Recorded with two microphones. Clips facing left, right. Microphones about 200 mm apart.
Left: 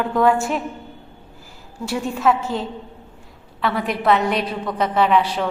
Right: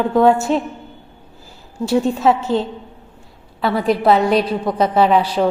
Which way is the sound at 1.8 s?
25° right (ahead or behind).